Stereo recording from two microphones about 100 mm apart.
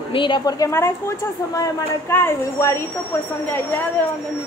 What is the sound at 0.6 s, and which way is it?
A woman's voice, 25° left (ahead or behind).